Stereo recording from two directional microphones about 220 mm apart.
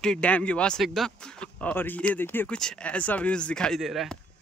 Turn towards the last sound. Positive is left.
turn(degrees=0)  # may be behind; listen again after turning